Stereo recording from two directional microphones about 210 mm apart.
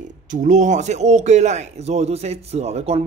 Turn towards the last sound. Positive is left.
turn(degrees=-30)  # may be behind; listen again after turning